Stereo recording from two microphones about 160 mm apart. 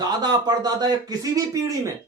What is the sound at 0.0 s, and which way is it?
A man's voice, 25° right (ahead or behind).